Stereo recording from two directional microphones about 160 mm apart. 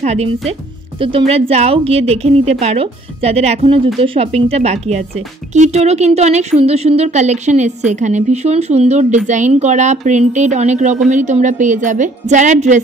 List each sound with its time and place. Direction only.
0.0 s a woman's voice: 40° right (ahead or behind)